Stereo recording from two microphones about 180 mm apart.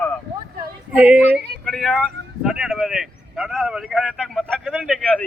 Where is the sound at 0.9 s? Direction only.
5° right (ahead or behind).